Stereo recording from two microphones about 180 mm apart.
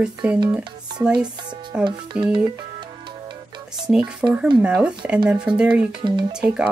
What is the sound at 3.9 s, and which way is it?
Speech, 5° right (ahead or behind).